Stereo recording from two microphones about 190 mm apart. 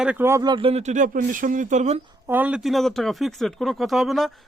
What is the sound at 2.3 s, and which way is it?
Speech, 10° right (ahead or behind).